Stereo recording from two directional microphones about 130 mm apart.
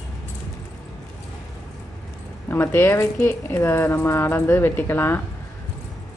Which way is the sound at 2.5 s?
15° left (ahead or behind).